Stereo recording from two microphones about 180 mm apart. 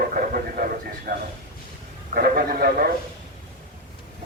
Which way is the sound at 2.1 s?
55° right (ahead or behind).